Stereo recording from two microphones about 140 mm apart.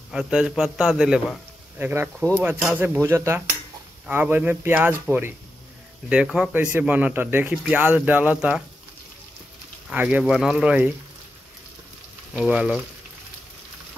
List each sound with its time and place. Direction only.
0.1 s a man's voice: 5° right (ahead or behind)
9.8 s speech: 10° right (ahead or behind)
12.4 s a man's voice: 5° right (ahead or behind)